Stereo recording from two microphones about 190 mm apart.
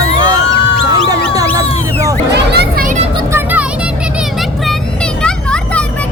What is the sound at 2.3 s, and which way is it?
Music, 60° right (ahead or behind).